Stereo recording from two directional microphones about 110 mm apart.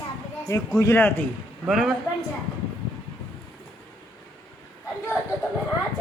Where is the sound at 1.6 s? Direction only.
Centre (ahead or behind).